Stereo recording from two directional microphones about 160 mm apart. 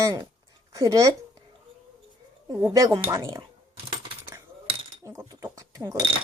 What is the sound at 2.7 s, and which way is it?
Speech, 20° right (ahead or behind).